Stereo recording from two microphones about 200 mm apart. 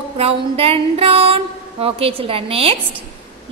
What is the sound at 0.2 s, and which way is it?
A woman's voice, 30° right (ahead or behind).